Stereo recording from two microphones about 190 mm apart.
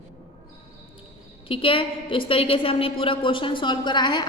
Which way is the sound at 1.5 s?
30° left (ahead or behind).